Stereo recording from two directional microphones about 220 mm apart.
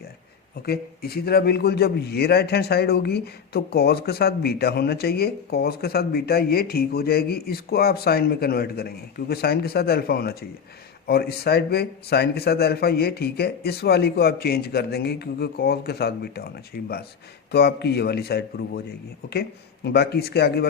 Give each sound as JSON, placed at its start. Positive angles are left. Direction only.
{"t": 0.6, "sound": "a man's voice", "side_deg": 45}